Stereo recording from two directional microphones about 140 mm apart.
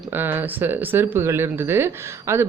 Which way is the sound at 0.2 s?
15° right (ahead or behind).